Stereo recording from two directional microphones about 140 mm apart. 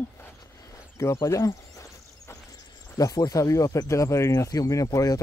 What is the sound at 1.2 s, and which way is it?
Cricket, 20° left (ahead or behind).